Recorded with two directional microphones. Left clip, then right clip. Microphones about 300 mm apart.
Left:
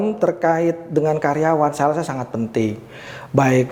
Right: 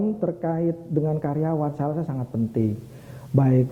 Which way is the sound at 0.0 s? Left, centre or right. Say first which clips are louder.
Left 8 dB; centre.